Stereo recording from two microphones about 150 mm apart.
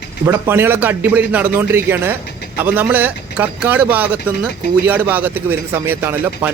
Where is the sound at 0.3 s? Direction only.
15° right (ahead or behind).